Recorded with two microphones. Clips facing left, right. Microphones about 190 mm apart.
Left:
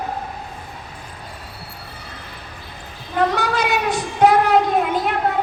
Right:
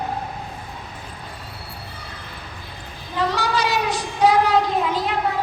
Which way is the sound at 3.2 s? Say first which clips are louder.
Left 3 dB; 55° left (ahead or behind).